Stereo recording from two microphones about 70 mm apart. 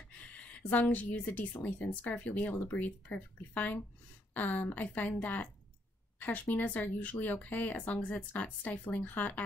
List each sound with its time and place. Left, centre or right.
0.1 s speech: centre